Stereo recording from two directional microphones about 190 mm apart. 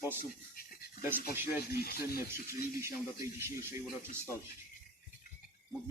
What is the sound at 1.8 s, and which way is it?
Speech, 55° left (ahead or behind).